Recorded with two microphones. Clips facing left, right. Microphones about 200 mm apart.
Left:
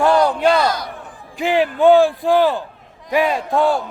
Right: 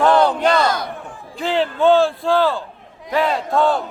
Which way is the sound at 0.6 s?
50° right (ahead or behind).